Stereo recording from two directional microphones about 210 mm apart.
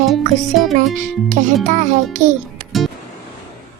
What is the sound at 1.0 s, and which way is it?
A child's voice, 35° right (ahead or behind).